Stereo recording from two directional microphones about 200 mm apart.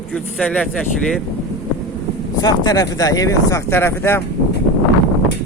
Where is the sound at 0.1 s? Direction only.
5° left (ahead or behind).